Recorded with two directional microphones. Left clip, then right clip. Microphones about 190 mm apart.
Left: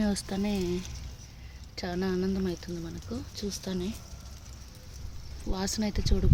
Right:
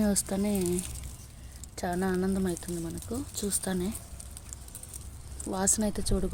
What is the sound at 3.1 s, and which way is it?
Speech, 30° right (ahead or behind).